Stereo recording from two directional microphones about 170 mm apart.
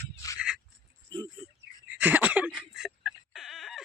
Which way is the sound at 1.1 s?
25° right (ahead or behind).